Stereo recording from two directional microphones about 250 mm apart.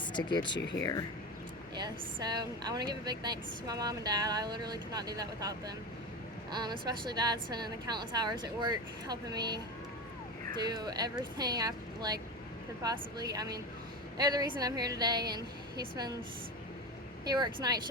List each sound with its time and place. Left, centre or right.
0.1 s speech: centre
1.7 s a woman's voice: centre
6.6 s a woman's voice: centre
10.7 s a woman's voice: centre
17.2 s a woman's voice: centre